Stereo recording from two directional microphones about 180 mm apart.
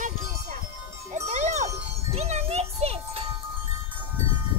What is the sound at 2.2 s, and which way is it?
Music, 35° right (ahead or behind).